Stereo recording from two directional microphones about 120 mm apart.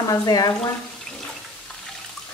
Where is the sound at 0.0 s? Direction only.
35° left (ahead or behind).